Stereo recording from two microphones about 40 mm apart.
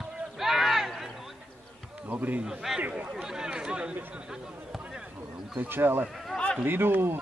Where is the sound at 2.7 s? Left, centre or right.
Centre; by 3.9 s right.